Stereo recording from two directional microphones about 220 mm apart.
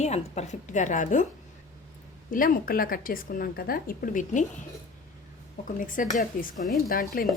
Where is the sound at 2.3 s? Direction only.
40° left (ahead or behind).